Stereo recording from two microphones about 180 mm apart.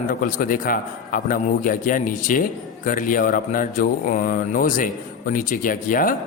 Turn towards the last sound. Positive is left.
turn(degrees=50)  # may be behind; listen again after turning